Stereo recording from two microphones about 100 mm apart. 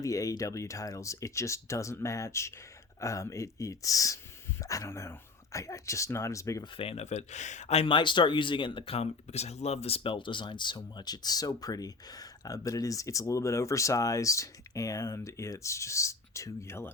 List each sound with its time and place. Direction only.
0.0 s speech: 35° left (ahead or behind)
6.7 s speech: 80° left
7.7 s speech: 70° left (ahead or behind); by 16.9 s 25° left (ahead or behind)